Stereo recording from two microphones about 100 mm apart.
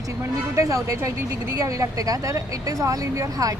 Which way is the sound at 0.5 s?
30° right (ahead or behind).